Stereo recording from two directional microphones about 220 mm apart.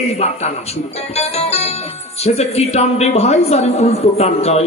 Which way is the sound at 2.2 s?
30° left (ahead or behind).